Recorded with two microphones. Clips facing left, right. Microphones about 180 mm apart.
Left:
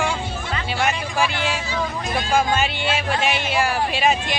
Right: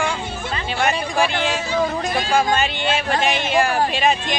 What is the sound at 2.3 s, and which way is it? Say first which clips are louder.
Speech: even; 5° left (ahead or behind).